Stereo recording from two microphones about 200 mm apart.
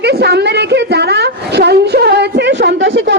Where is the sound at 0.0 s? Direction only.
55° right (ahead or behind).